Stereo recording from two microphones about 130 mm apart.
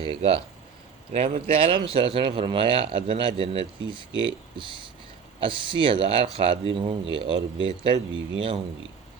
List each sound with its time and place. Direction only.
0.0 s speech: 45° right (ahead or behind)